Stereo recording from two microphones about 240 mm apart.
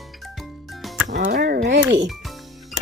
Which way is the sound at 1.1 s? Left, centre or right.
Right.